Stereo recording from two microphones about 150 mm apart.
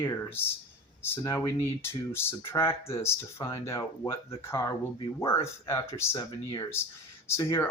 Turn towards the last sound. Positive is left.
turn(degrees=15)  # may be behind; listen again after turning